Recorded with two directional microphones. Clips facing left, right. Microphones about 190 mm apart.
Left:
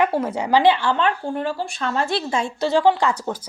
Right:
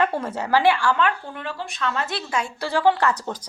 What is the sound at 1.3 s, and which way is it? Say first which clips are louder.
Speech: left 7 dB; 35° left (ahead or behind).